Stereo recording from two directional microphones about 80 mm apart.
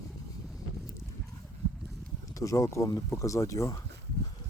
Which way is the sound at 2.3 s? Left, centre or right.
Left.